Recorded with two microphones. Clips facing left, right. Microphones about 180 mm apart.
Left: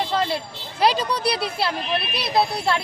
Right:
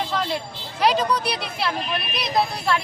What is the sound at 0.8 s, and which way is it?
Speech, 35° left (ahead or behind).